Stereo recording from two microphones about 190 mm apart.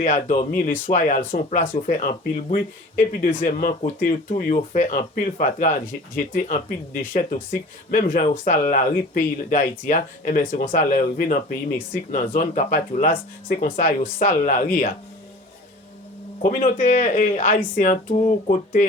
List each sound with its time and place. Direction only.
0.0 s speech: 40° left (ahead or behind)
7.1 s speech: 45° left (ahead or behind)
16.7 s speech: 45° left (ahead or behind)